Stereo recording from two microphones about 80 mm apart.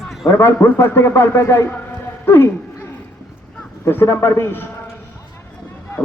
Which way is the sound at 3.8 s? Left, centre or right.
Left.